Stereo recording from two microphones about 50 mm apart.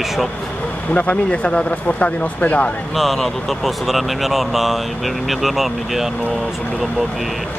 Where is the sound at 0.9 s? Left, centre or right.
Left.